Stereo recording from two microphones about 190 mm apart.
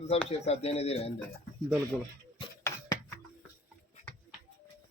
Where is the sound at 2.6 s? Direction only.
15° left (ahead or behind).